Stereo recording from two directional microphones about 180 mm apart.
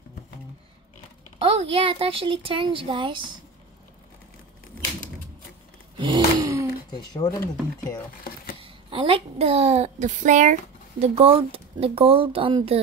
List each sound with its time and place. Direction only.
1.4 s speech: 30° right (ahead or behind)
5.9 s gasp: 25° right (ahead or behind)
6.9 s speech: 20° left (ahead or behind)
8.5 s a child's voice: 30° right (ahead or behind)